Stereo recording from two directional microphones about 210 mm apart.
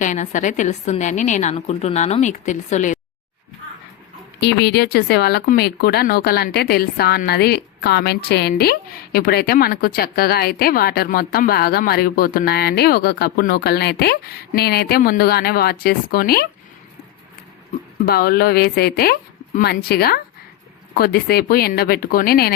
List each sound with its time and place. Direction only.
0.0 s a woman's voice: 35° left (ahead or behind)
4.4 s speech: 55° left (ahead or behind)
18.0 s speech: 45° left (ahead or behind)